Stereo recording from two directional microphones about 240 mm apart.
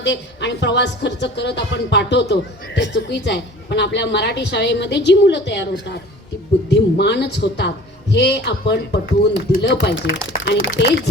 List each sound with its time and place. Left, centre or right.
0.0 s a woman's voice: left